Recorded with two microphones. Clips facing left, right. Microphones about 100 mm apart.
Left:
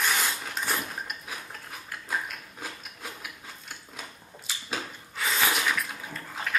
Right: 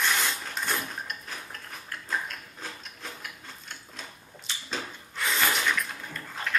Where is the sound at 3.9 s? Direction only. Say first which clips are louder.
Left 1 dB; 5° left (ahead or behind).